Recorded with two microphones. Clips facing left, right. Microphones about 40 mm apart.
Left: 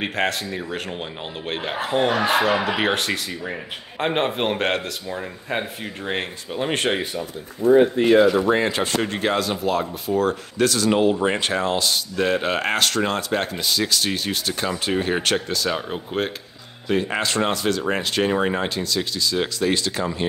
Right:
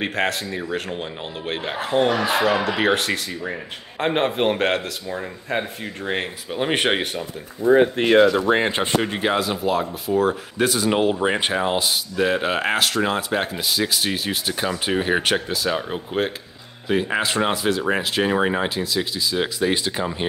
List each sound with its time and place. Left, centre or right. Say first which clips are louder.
0.0 s a man's voice: even; centre
6.5 s speech: right 2 dB; centre
7.9 s speech: even; right
8.5 s speech: right 1 dB; right
9.0 s speech: right 1 dB; centre